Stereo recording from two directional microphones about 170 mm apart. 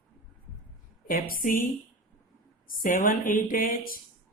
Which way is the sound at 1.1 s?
55° left (ahead or behind).